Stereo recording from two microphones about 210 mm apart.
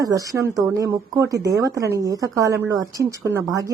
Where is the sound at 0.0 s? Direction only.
15° right (ahead or behind).